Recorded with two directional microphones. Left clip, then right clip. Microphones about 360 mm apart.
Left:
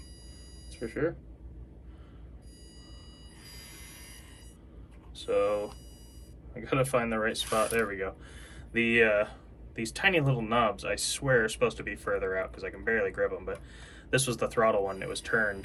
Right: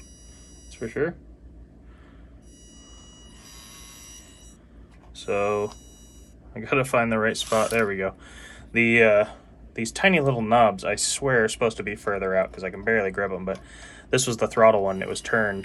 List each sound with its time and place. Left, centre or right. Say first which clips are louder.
0.7 s speech: right 5 dB; right
5.1 s speech: right 3 dB; right